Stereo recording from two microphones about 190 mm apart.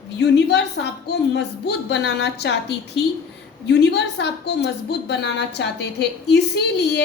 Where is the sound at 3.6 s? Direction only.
65° left (ahead or behind).